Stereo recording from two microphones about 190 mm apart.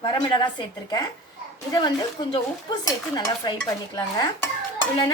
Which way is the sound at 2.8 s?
20° left (ahead or behind).